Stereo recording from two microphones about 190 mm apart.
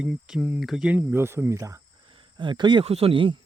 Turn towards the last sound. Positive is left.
turn(degrees=-25)  # may be behind; listen again after turning